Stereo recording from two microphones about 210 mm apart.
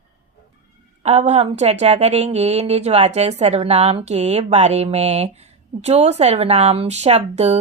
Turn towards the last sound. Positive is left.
turn(degrees=-30)  # may be behind; listen again after turning